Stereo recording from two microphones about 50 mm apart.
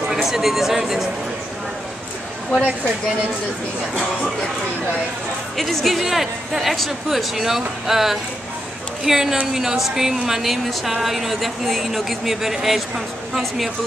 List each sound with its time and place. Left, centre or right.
0.1 s speech: centre
3.9 s music: centre
5.6 s a woman's voice: centre